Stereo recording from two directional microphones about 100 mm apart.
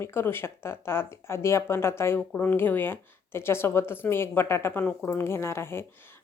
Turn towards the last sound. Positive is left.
turn(degrees=25)  # may be behind; listen again after turning